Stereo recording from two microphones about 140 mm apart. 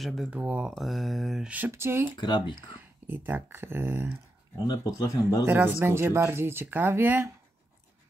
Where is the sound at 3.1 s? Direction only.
15° right (ahead or behind).